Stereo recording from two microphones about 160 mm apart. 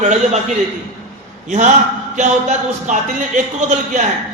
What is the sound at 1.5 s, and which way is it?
A man's voice, 50° right (ahead or behind).